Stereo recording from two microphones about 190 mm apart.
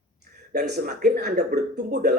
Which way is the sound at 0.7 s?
55° right (ahead or behind).